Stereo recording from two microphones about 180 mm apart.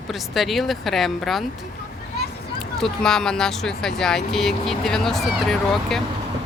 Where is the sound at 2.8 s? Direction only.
5° left (ahead or behind).